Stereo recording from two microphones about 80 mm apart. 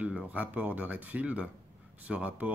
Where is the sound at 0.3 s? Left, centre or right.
Centre.